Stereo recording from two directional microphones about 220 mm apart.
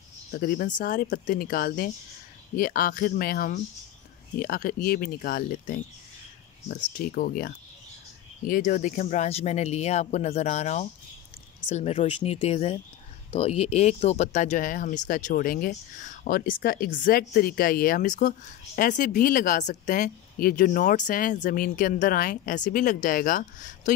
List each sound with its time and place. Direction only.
0.3 s speech: 40° left (ahead or behind)